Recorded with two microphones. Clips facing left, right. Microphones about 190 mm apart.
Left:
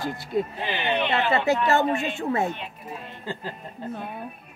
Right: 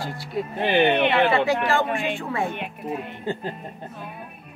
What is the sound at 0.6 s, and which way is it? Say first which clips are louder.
Speech: right 7 dB; 60° right (ahead or behind).